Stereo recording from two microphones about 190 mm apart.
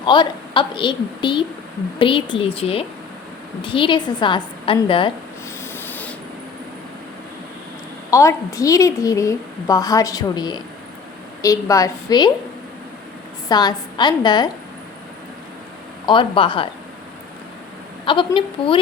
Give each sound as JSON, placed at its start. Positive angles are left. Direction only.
{"t": 0.0, "sound": "a woman's voice", "side_deg": 25}
{"t": 5.7, "sound": "a sound", "side_deg": 10}
{"t": 8.1, "sound": "a woman's voice", "side_deg": 15}
{"t": 13.5, "sound": "a woman's voice", "side_deg": 20}
{"t": 16.0, "sound": "a woman's voice", "side_deg": 25}
{"t": 18.0, "sound": "a woman's voice", "side_deg": 25}